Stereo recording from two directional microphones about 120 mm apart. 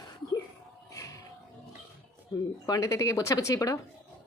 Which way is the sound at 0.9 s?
25° left (ahead or behind).